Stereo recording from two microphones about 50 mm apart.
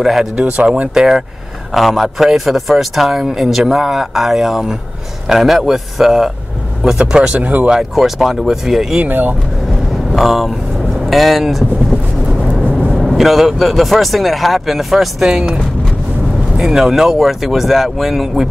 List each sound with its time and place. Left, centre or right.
0.0 s speech: centre
0.6 s speech: right
0.9 s a man's voice: centre
7.3 s speech: right
7.9 s a man's voice: centre
9.0 s speech: right
10.1 s a man's voice: centre
12.9 s a man's voice: centre
15.2 s a man's voice: centre